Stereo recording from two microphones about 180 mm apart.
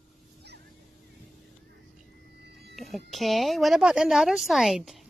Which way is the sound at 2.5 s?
65° right (ahead or behind).